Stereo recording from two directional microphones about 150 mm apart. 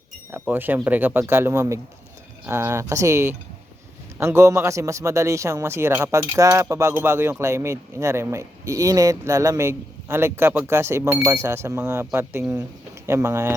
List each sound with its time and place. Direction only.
0.3 s a man's voice: 15° right (ahead or behind)